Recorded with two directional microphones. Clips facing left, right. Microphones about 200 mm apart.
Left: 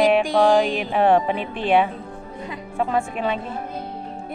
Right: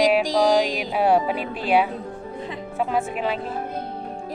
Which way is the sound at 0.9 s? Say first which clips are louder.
Left 2 dB; 5° right (ahead or behind).